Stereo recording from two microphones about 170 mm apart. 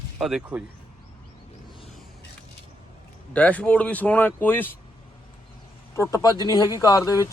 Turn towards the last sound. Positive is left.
turn(degrees=20)  # may be behind; listen again after turning